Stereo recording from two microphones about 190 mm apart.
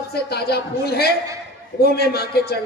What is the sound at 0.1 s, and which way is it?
Speech, 55° left (ahead or behind).